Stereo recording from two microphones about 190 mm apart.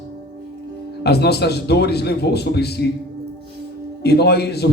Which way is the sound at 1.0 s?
60° left (ahead or behind).